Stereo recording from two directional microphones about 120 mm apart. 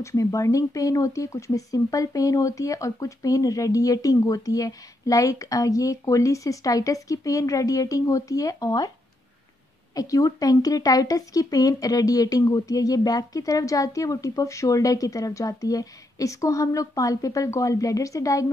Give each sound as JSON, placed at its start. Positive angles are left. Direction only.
{"t": 0.0, "sound": "speech", "side_deg": 25}
{"t": 9.9, "sound": "speech", "side_deg": 30}